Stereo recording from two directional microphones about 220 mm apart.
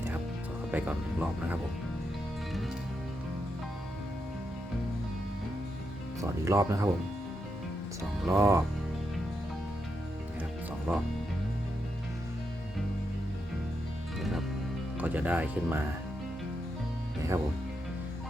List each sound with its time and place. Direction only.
0.7 s speech: 5° right (ahead or behind)
6.4 s speech: 15° right (ahead or behind)
8.3 s speech: 15° right (ahead or behind)
10.9 s speech: 10° right (ahead or behind)
14.2 s music: centre (ahead or behind)
14.9 s speech: 10° right (ahead or behind)